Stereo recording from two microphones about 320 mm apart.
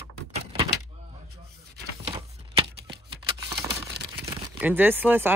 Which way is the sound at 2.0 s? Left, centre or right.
Centre.